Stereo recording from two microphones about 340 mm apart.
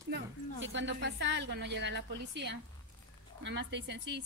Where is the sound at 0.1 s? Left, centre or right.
Right.